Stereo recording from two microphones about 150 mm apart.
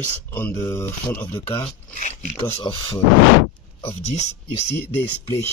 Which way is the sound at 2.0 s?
55° left (ahead or behind).